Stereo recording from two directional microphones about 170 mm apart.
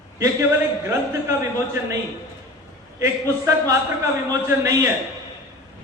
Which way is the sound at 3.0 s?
15° right (ahead or behind).